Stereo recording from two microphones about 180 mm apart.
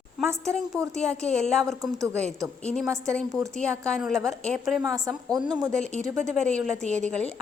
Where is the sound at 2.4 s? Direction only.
5° left (ahead or behind).